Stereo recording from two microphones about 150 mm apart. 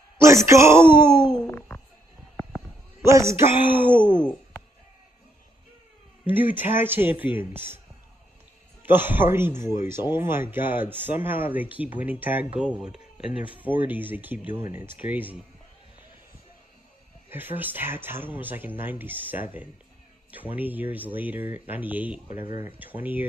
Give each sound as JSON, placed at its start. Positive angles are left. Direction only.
{"t": 0.5, "sound": "speech", "side_deg": -20}
{"t": 3.0, "sound": "speech", "side_deg": -20}
{"t": 4.2, "sound": "a sound", "side_deg": 10}
{"t": 6.2, "sound": "speech", "side_deg": -10}
{"t": 8.8, "sound": "speech", "side_deg": -15}
{"t": 17.3, "sound": "speech", "side_deg": -15}